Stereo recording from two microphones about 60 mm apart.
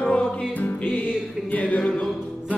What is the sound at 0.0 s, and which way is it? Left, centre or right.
Music, left.